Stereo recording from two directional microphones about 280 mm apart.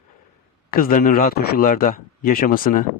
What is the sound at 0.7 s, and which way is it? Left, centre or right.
Speech, left.